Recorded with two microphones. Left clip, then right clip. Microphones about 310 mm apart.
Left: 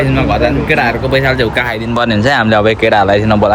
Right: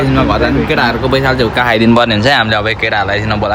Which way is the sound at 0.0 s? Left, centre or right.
Centre.